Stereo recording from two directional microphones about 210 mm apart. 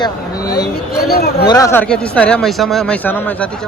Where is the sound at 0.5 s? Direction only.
50° left (ahead or behind).